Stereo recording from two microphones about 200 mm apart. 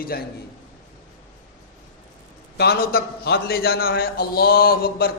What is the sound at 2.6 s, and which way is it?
A man's voice, 50° left (ahead or behind).